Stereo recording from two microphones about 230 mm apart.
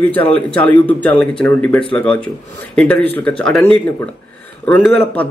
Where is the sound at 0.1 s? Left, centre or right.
Centre.